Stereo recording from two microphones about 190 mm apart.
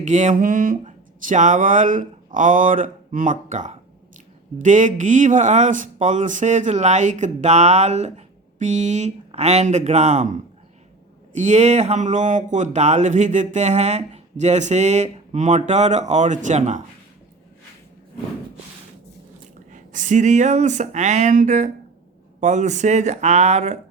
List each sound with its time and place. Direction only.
0.0 s speech: 40° right (ahead or behind)
11.3 s speech: 40° right (ahead or behind)
19.7 s speech: 40° right (ahead or behind)